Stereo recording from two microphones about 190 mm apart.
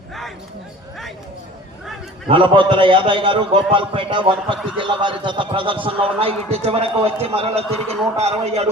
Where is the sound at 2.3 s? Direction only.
25° right (ahead or behind).